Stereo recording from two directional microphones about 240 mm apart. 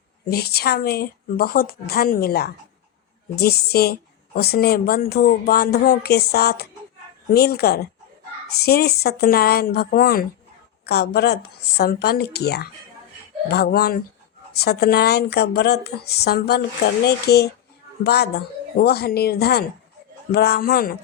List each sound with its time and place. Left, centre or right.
0.3 s speech: left